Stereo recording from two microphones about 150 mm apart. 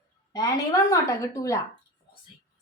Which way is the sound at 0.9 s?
20° left (ahead or behind).